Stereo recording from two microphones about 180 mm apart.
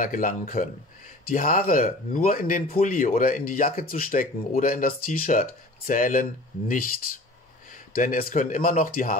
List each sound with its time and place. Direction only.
0.0 s speech: 50° left (ahead or behind)
7.9 s speech: 50° left (ahead or behind)